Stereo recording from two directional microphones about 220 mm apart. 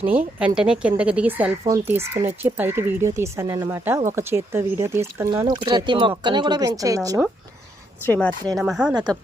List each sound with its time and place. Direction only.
0.0 s a woman's voice: 10° right (ahead or behind)
8.0 s a woman's voice: 10° left (ahead or behind)